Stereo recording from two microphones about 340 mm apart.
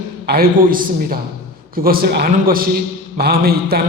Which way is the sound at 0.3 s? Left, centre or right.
Right.